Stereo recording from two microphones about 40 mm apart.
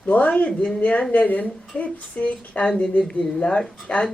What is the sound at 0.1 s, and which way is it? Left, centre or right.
Speech, left.